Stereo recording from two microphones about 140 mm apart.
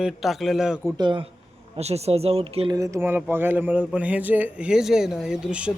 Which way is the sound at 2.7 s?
20° right (ahead or behind).